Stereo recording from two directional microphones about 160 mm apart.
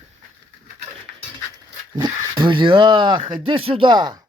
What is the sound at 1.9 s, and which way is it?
A man's voice, 25° right (ahead or behind).